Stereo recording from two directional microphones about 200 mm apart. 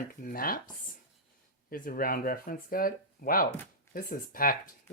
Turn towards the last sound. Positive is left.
turn(degrees=45)  # may be behind; listen again after turning